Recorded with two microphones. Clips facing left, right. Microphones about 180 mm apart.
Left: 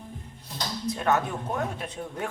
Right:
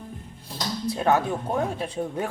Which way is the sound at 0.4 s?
30° right (ahead or behind).